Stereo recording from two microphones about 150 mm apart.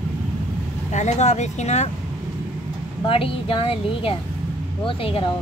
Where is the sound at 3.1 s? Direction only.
35° left (ahead or behind).